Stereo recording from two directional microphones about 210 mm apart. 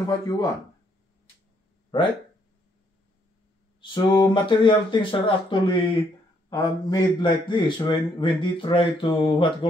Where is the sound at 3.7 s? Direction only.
20° left (ahead or behind).